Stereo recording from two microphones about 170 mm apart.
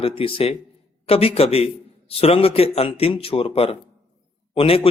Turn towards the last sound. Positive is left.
turn(degrees=35)  # may be behind; listen again after turning